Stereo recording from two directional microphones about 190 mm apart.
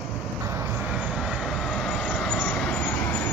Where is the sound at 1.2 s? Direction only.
Centre (ahead or behind).